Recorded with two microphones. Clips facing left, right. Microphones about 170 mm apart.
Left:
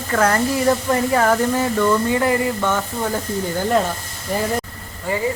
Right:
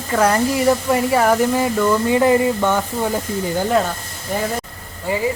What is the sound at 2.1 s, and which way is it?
Speech, 20° right (ahead or behind).